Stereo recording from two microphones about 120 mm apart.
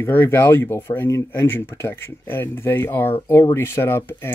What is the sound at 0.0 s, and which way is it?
Speech, 20° left (ahead or behind).